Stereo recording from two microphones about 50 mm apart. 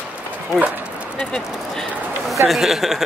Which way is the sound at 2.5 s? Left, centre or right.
Centre.